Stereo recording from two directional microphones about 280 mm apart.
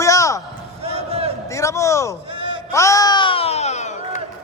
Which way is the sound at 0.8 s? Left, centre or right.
Right.